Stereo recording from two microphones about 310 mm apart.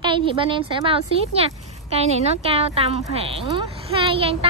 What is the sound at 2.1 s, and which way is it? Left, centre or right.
A woman's voice, centre.